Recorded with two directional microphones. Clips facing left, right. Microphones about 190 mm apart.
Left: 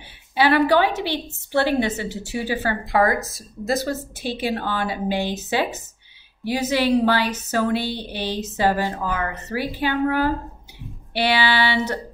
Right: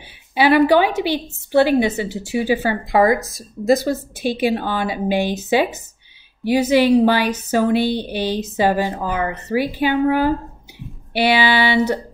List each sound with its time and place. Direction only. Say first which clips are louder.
0.3 s a woman's voice: right 4 dB; 15° right (ahead or behind)